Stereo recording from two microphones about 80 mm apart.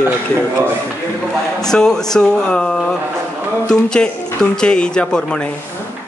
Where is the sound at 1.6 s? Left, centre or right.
Centre.